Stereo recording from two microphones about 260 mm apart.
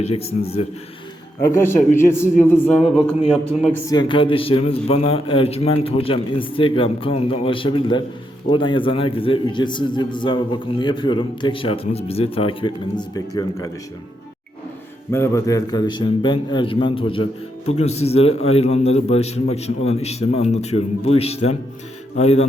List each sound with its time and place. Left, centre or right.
0.0 s a man's voice: left
1.4 s a man's voice: centre
2.9 s a man's voice: centre
3.8 s a man's voice: centre
15.1 s a man's voice: centre